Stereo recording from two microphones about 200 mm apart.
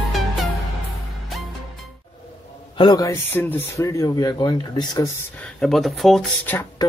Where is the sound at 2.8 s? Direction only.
20° left (ahead or behind).